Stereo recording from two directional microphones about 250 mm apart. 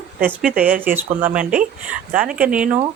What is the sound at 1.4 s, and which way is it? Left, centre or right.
Speech, right.